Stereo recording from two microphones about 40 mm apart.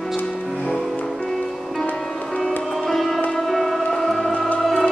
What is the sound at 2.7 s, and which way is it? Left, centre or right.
Music, centre.